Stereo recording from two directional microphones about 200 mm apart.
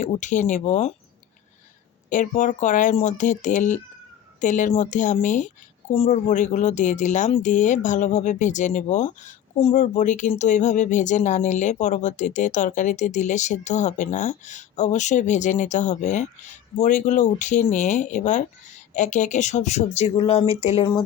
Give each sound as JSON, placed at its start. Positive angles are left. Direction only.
{"t": 0.0, "sound": "speech", "side_deg": 40}
{"t": 2.0, "sound": "speech", "side_deg": 40}